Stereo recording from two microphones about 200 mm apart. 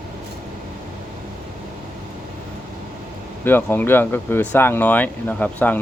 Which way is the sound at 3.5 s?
10° left (ahead or behind).